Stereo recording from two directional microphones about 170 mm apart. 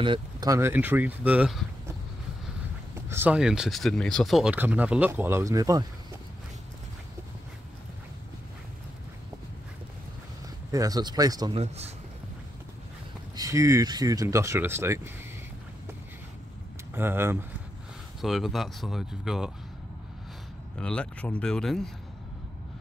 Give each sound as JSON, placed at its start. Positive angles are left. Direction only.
{"t": 0.0, "sound": "speech", "side_deg": -25}
{"t": 3.1, "sound": "speech", "side_deg": -10}
{"t": 10.7, "sound": "speech", "side_deg": -20}
{"t": 11.5, "sound": "speech", "side_deg": -40}
{"t": 13.4, "sound": "speech", "side_deg": -20}
{"t": 16.9, "sound": "speech", "side_deg": -15}
{"t": 18.2, "sound": "speech", "side_deg": 0}
{"t": 20.7, "sound": "speech", "side_deg": 5}